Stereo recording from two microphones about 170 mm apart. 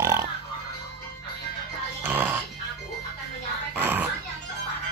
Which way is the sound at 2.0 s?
10° right (ahead or behind).